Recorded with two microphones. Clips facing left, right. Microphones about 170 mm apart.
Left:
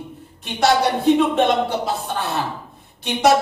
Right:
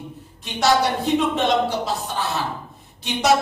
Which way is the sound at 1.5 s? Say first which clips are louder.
Left 1 dB; 55° left (ahead or behind).